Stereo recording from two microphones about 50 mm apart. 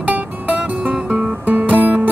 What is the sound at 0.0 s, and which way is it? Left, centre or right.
Guitar, right.